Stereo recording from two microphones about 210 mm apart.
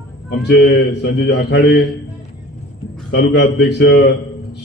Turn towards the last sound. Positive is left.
turn(degrees=55)  # may be behind; listen again after turning